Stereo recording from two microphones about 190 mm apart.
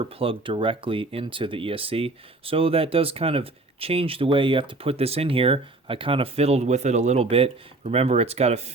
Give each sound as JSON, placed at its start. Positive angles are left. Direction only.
{"t": 0.0, "sound": "speech", "side_deg": -30}